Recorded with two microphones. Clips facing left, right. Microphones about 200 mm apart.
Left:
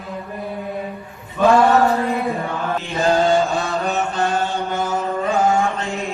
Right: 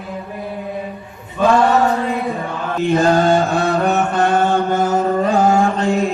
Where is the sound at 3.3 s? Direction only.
60° right (ahead or behind).